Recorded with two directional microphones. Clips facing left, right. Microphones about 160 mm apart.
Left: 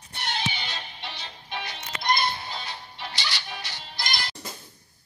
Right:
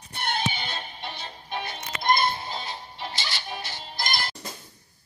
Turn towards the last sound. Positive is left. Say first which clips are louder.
# right 3 dB
turn(degrees=-50)  # may be behind; listen again after turning